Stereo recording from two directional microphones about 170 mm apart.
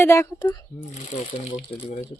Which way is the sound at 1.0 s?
45° left (ahead or behind).